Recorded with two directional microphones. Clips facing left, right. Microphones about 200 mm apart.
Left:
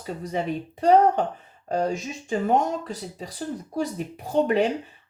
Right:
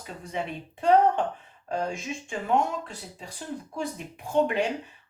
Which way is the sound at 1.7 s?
40° left (ahead or behind).